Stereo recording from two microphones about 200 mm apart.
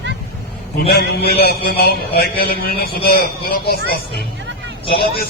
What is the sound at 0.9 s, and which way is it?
A man's voice, 50° left (ahead or behind).